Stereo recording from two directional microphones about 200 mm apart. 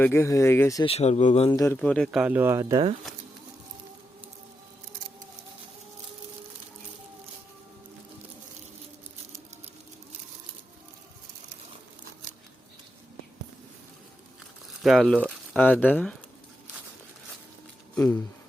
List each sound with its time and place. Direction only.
0.0 s speech: 15° left (ahead or behind)
0.9 s speech: 30° left (ahead or behind)
1.5 s speech: 15° left (ahead or behind); by 2.8 s 15° right (ahead or behind)
14.7 s speech: centre (ahead or behind)
17.9 s speech: 10° left (ahead or behind)